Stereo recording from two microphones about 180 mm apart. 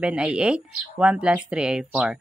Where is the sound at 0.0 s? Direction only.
5° right (ahead or behind).